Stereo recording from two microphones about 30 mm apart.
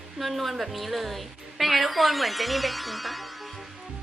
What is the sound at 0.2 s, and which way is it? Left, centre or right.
A woman's voice, centre.